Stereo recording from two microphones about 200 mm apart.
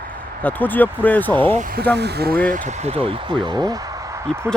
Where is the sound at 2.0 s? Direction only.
55° right (ahead or behind).